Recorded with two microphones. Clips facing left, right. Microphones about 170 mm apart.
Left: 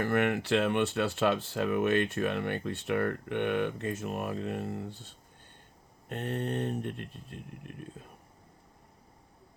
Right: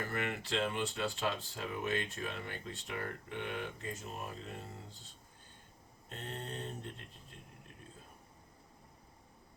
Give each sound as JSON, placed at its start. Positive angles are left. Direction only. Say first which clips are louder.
{"t": 0.0, "sound": "speech", "louder": "left 10 dB", "side_deg": 70}